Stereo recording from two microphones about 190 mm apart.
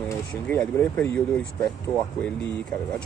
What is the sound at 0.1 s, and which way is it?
Speech, 10° left (ahead or behind).